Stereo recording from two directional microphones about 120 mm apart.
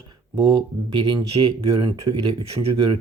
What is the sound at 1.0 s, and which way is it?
Speech, 40° right (ahead or behind).